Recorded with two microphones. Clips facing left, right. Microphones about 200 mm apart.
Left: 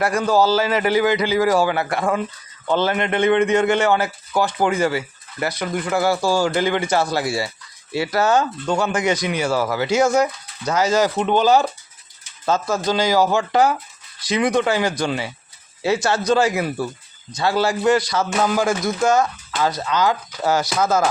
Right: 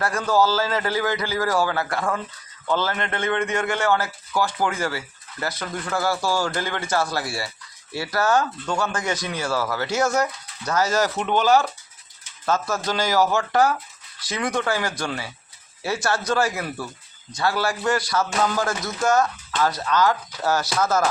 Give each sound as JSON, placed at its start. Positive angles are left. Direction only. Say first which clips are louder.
{"t": 0.0, "sound": "a man's voice", "louder": "left 3 dB", "side_deg": 15}